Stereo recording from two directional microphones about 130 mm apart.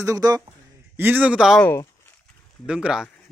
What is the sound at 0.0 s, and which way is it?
Speech, 25° right (ahead or behind).